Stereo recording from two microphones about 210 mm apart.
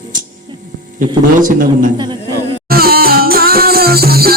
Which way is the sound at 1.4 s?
40° right (ahead or behind).